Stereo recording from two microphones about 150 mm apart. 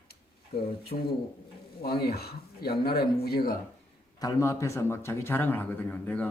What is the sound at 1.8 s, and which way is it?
Speech, 90° left.